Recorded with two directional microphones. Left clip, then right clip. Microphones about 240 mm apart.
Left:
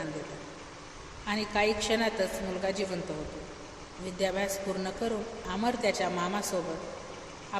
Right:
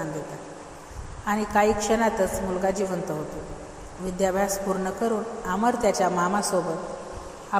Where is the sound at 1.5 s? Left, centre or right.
Centre.